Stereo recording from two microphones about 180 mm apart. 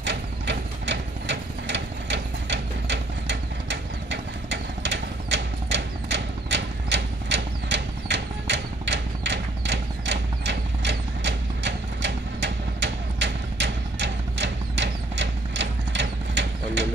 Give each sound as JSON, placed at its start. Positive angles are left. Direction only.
{"t": 0.0, "sound": "ratchet", "side_deg": -80}